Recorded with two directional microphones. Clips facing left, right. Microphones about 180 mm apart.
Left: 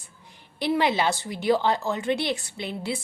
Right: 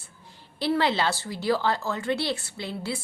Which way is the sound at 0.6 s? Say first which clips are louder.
Left 1 dB; 15° left (ahead or behind).